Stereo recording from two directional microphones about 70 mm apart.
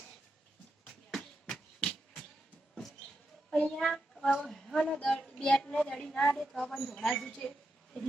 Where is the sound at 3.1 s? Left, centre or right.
Centre.